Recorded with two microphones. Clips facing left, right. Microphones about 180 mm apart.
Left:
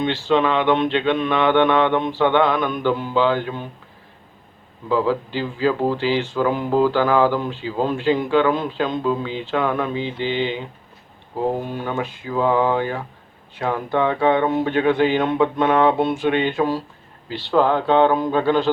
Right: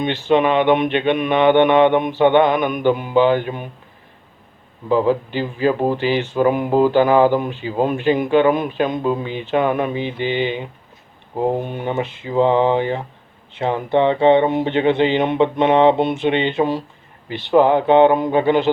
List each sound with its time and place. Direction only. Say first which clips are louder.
0.0 s mantra: right 2 dB; 20° right (ahead or behind)
4.9 s speech: right 3 dB; 20° right (ahead or behind)